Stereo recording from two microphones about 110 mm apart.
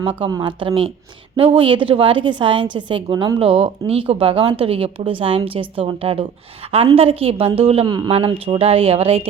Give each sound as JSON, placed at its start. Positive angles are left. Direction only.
{"t": 0.0, "sound": "a woman's voice", "side_deg": -50}
{"t": 0.3, "sound": "speech", "side_deg": -35}
{"t": 0.6, "sound": "a woman's voice", "side_deg": -55}
{"t": 7.9, "sound": "speech", "side_deg": -40}
{"t": 8.1, "sound": "speech", "side_deg": -60}